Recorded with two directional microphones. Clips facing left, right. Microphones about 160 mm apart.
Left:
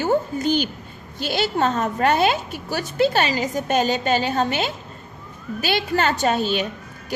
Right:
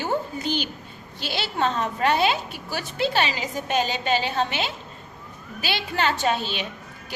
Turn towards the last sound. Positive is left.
turn(degrees=45)  # may be behind; listen again after turning